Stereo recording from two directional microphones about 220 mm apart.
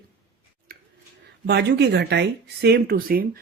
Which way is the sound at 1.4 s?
50° right (ahead or behind).